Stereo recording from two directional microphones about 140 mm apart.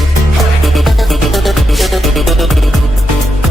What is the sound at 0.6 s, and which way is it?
Music, centre (ahead or behind).